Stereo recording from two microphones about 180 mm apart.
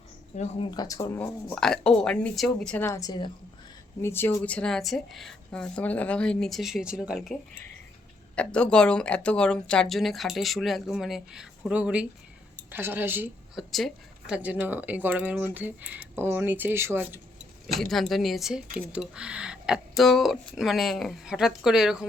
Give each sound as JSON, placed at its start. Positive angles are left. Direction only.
{"t": 0.3, "sound": "speech", "side_deg": 40}
{"t": 0.7, "sound": "speech", "side_deg": 20}
{"t": 1.5, "sound": "speech", "side_deg": 5}
{"t": 2.8, "sound": "speech", "side_deg": 20}
{"t": 8.4, "sound": "speech", "side_deg": 5}
{"t": 13.6, "sound": "speech", "side_deg": 0}
{"t": 17.7, "sound": "speech", "side_deg": 0}